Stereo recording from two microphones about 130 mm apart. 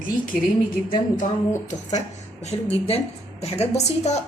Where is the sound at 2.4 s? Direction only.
55° left (ahead or behind).